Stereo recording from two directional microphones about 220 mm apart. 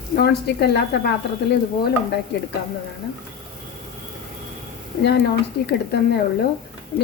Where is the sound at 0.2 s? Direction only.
45° left (ahead or behind).